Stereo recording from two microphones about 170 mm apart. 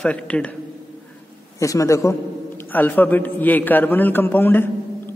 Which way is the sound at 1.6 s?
20° left (ahead or behind).